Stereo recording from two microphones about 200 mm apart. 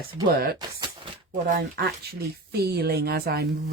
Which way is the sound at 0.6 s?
25° right (ahead or behind).